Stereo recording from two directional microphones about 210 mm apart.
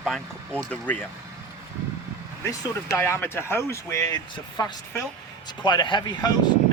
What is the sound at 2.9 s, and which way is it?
Speech, 10° left (ahead or behind).